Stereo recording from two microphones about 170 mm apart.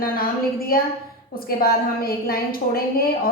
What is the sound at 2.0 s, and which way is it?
Speech, 60° left (ahead or behind).